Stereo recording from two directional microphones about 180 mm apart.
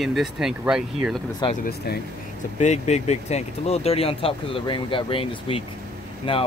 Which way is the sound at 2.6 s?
40° left (ahead or behind).